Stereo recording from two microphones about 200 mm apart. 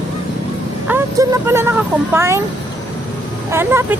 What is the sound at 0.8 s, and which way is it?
Speech, 10° right (ahead or behind).